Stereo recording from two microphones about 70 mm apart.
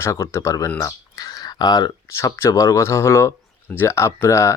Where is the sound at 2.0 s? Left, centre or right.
Left.